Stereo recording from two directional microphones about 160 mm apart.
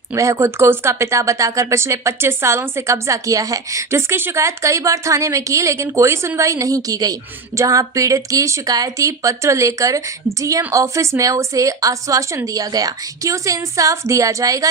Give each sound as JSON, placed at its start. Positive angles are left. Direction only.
{"t": 0.1, "sound": "speech", "side_deg": -15}